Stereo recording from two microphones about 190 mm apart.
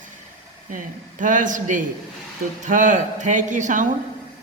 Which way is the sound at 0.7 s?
45° right (ahead or behind).